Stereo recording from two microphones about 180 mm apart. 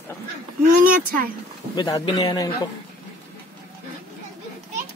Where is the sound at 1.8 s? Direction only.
20° left (ahead or behind).